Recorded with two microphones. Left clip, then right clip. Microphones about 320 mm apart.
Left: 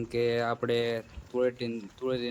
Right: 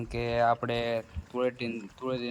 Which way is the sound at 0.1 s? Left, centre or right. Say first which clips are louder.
Right 2 dB; centre.